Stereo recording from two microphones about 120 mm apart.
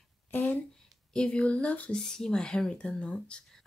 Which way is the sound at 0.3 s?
15° left (ahead or behind).